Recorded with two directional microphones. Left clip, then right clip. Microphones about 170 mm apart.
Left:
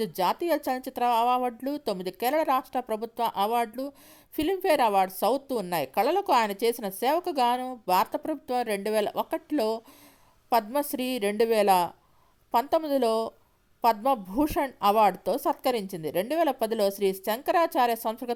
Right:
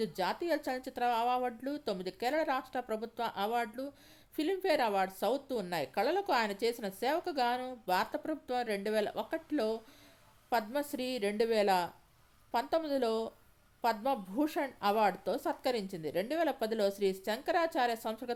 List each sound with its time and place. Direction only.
0.0 s a woman's voice: 35° left (ahead or behind)